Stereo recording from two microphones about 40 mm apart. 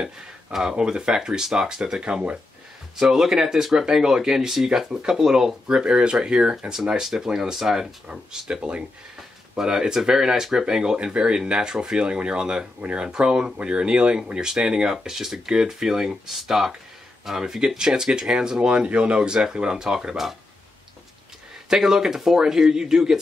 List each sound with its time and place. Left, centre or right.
0.5 s speech: centre
5.7 s speech: right
7.5 s speech: centre
8.3 s speech: right
21.6 s speech: centre